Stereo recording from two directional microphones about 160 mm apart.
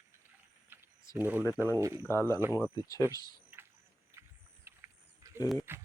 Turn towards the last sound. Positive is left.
turn(degrees=-15)  # may be behind; listen again after turning